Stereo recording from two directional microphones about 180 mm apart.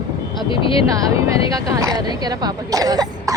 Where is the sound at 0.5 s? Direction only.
30° left (ahead or behind).